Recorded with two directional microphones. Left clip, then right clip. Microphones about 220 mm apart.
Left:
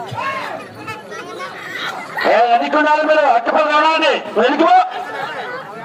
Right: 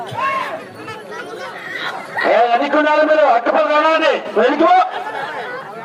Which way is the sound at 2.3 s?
30° left (ahead or behind).